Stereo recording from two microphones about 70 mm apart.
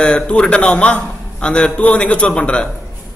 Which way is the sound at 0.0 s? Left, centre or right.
Centre.